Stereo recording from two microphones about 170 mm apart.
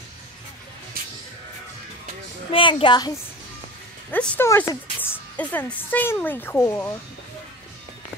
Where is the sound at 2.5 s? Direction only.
30° left (ahead or behind).